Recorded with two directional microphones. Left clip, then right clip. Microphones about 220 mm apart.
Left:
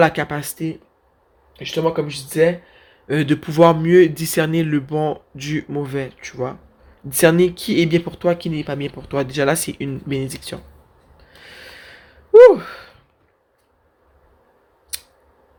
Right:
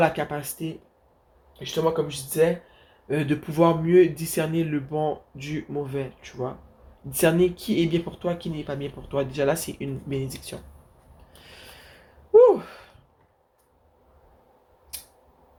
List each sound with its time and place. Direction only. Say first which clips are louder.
0.0 s speech: left 6 dB; 40° left (ahead or behind)
12.3 s gasp: left 8 dB; 45° left (ahead or behind)